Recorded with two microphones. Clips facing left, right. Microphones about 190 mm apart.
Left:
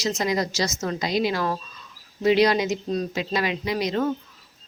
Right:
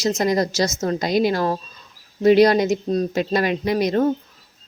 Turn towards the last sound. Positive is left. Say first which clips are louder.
# right 6 dB
turn(degrees=-50)  # may be behind; listen again after turning